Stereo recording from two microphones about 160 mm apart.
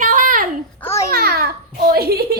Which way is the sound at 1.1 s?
75° right (ahead or behind).